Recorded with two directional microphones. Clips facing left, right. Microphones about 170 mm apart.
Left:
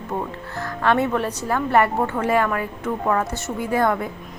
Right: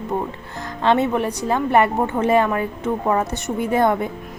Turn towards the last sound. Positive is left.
turn(degrees=-20)  # may be behind; listen again after turning